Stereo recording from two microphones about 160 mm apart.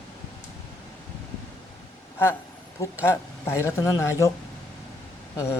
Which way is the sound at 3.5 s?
20° left (ahead or behind).